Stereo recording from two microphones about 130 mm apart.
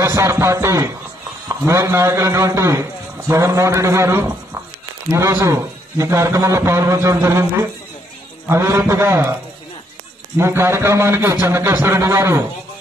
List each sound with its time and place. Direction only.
0.0 s a man's voice: 25° right (ahead or behind)
8.5 s a man's voice: 20° right (ahead or behind)
10.3 s a man's voice: 20° right (ahead or behind)